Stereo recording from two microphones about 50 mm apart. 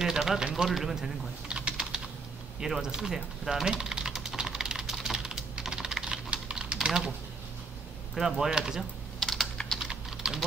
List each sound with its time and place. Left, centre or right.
0.0 s speech: centre
1.5 s typing: right
2.6 s speech: centre
3.4 s typing: centre
8.1 s speech: centre
9.2 s typing: centre
9.8 s typing: centre